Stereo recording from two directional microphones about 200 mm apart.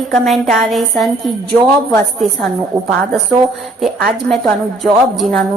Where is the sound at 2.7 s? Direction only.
15° right (ahead or behind).